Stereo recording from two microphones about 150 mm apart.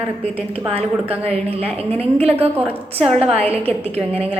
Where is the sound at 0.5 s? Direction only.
40° right (ahead or behind).